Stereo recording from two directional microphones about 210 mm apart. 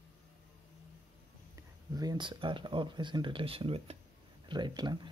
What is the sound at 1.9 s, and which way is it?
Speech, 20° right (ahead or behind).